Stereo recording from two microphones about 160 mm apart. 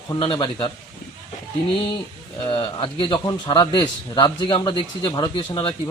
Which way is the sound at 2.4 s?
30° left (ahead or behind).